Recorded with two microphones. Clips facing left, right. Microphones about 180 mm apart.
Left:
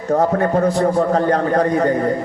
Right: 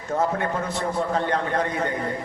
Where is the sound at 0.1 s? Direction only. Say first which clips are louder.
Left 8 dB; 40° left (ahead or behind).